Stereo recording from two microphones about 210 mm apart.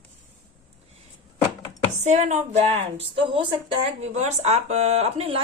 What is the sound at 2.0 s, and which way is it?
A woman's voice, 35° right (ahead or behind).